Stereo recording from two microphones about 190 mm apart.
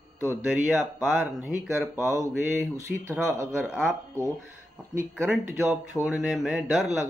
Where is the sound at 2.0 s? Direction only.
15° right (ahead or behind).